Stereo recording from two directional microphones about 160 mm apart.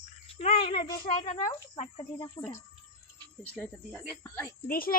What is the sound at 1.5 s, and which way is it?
Speech, 20° left (ahead or behind).